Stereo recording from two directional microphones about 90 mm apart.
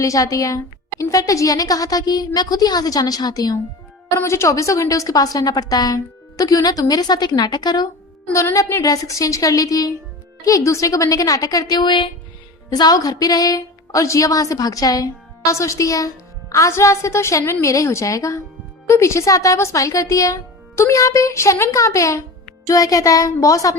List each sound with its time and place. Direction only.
0.0 s a woman's voice: 40° left (ahead or behind)
4.1 s a woman's voice: 30° left (ahead or behind); by 7.9 s 50° left (ahead or behind)
8.5 s speech: 40° left (ahead or behind); by 12.1 s 60° left (ahead or behind)
12.7 s speech: 45° left (ahead or behind)